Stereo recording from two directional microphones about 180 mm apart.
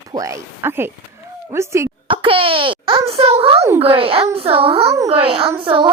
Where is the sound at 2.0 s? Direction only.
30° right (ahead or behind).